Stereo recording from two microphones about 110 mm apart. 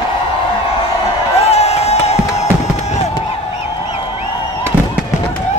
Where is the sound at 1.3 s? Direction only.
70° left (ahead or behind).